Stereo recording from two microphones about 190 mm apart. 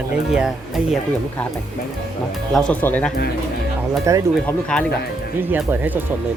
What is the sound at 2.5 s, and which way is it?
Speech, 5° left (ahead or behind).